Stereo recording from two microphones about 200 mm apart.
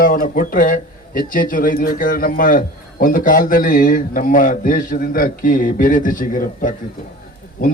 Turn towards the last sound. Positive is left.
turn(degrees=45)  # may be behind; listen again after turning